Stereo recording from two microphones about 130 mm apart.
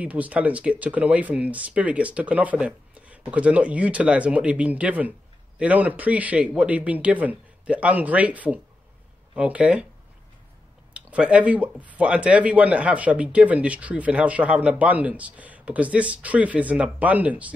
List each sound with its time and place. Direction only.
0.0 s speech: 10° right (ahead or behind)
10.9 s speech: 10° right (ahead or behind)